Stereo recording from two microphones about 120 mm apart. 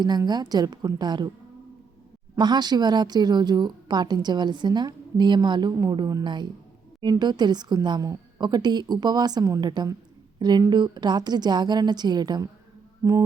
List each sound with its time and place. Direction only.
0.0 s a woman's voice: 35° right (ahead or behind)
2.4 s a woman's voice: 35° right (ahead or behind)
13.0 s music: 25° right (ahead or behind)